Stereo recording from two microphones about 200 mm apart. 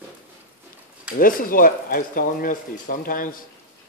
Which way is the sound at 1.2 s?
45° left (ahead or behind).